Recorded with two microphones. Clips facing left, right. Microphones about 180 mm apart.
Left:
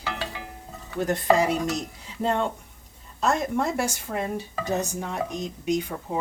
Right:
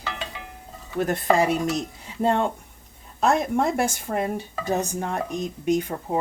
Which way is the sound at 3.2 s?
55° right (ahead or behind).